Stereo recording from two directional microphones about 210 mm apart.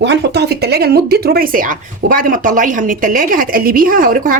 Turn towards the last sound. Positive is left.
turn(degrees=-40)  # may be behind; listen again after turning